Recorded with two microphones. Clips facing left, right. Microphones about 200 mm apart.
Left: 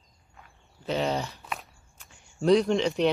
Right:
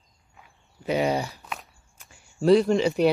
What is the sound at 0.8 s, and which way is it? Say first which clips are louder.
Speech: right 4 dB; 10° right (ahead or behind).